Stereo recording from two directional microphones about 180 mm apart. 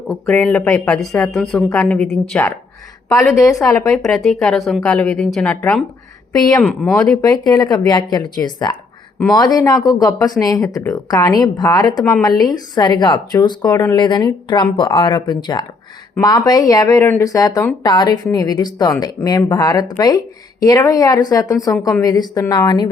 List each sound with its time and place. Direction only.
0.1 s speech: 5° left (ahead or behind)
3.1 s a woman's voice: 15° left (ahead or behind)
3.9 s speech: centre (ahead or behind)
7.2 s speech: 20° left (ahead or behind)